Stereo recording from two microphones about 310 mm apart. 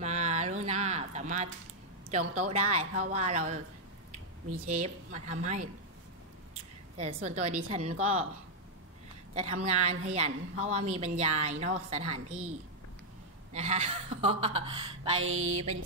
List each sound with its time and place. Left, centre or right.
0.0 s a sound: right
2.0 s a woman's voice: right
4.6 s a woman's voice: right
7.2 s a woman's voice: right
9.3 s a woman's voice: right
15.1 s music: right